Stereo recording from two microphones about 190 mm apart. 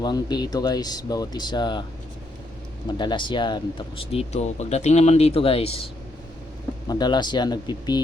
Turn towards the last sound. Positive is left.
turn(degrees=20)  # may be behind; listen again after turning